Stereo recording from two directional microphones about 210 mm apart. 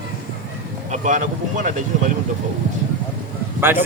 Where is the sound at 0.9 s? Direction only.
35° right (ahead or behind).